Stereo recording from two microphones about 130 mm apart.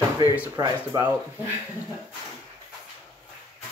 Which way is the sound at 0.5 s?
30° right (ahead or behind).